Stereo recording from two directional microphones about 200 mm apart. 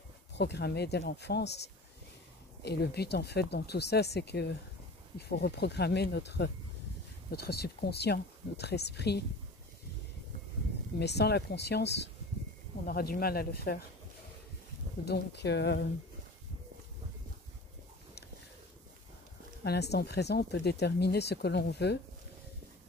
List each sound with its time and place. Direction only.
0.4 s speech: 55° left (ahead or behind)
2.6 s speech: 55° left (ahead or behind)
11.0 s speech: 55° left (ahead or behind)
15.0 s speech: 55° left (ahead or behind)
19.6 s speech: 55° left (ahead or behind)